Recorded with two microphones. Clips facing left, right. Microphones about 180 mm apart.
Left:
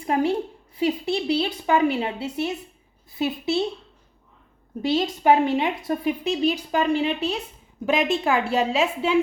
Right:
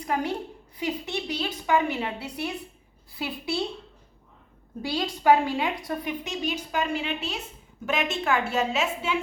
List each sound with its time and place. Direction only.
0.0 s a woman's voice: 30° left (ahead or behind)
4.8 s a woman's voice: 25° left (ahead or behind)